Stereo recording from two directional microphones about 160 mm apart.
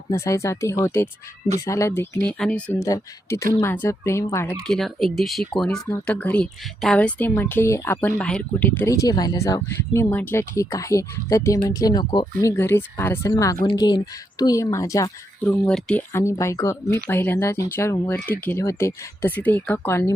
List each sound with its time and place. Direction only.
0.1 s speech: 20° left (ahead or behind)
2.8 s speech: 20° left (ahead or behind)
4.6 s speech: centre (ahead or behind); by 15.1 s 20° left (ahead or behind)
15.4 s speech: 5° left (ahead or behind)
16.1 s speech: 20° left (ahead or behind)